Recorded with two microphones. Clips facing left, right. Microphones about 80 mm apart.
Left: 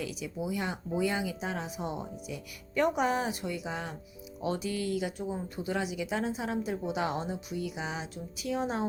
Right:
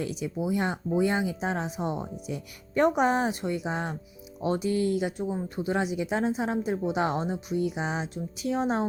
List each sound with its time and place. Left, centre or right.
0.0 s speech: right